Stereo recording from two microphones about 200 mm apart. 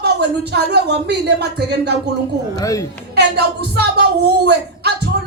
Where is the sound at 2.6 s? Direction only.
15° left (ahead or behind).